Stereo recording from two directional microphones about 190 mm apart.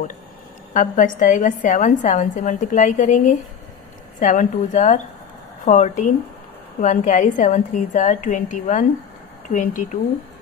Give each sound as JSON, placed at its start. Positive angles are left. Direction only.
{"t": 0.7, "sound": "a woman's voice", "side_deg": 45}